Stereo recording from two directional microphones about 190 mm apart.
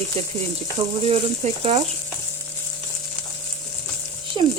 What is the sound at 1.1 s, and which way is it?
Speech, 35° right (ahead or behind).